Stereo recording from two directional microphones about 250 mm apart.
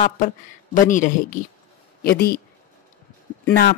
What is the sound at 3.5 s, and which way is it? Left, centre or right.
Speech, left.